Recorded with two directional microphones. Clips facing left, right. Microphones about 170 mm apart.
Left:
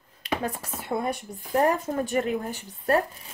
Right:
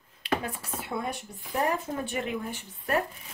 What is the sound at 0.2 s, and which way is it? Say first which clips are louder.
Chopping: left 1 dB; 45° left (ahead or behind).